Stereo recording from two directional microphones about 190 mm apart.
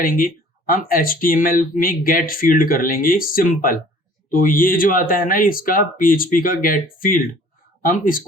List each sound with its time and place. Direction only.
0.0 s speech: 45° left (ahead or behind)